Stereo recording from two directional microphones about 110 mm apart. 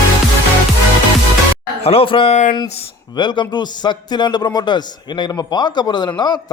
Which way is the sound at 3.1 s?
45° left (ahead or behind).